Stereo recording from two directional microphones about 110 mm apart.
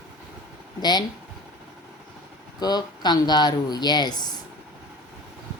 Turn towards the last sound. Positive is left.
turn(degrees=40)  # may be behind; listen again after turning